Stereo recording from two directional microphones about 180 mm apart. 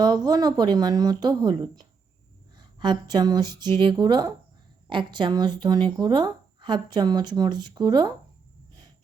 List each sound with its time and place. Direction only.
0.0 s speech: 25° right (ahead or behind)